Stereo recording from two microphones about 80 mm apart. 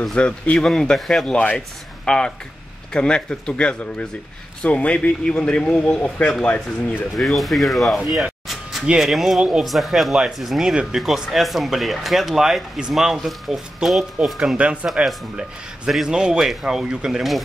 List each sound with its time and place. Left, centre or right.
0.0 s speech: centre
1.3 s speech: centre
7.2 s speech: centre
8.1 s a sound: centre
9.4 s speech: centre
14.6 s speech: centre
15.0 s speech: centre